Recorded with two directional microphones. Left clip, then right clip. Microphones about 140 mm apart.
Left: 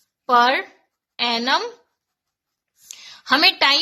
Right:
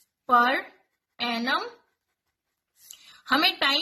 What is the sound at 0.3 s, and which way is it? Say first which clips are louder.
A woman's voice: left 5 dB; 45° left (ahead or behind).